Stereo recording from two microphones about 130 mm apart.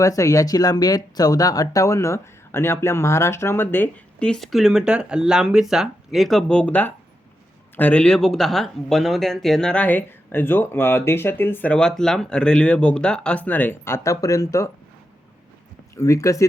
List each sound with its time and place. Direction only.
0.0 s speech: 25° left (ahead or behind)
16.0 s speech: 25° left (ahead or behind)